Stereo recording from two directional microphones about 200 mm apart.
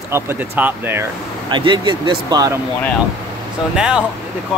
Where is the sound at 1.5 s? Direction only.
25° right (ahead or behind).